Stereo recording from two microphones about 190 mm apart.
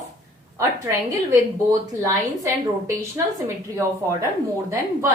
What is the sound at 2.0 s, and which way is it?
Speech, 15° right (ahead or behind).